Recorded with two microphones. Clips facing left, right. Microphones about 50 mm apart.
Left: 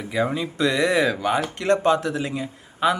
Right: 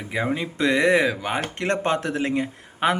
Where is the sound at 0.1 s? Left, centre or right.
Right.